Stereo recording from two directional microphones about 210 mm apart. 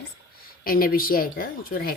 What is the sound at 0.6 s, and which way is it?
A woman's voice, 45° left (ahead or behind).